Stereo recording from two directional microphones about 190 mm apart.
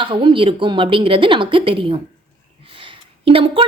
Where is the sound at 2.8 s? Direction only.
25° right (ahead or behind).